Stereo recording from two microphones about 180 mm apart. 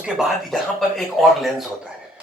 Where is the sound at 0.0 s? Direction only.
Centre (ahead or behind).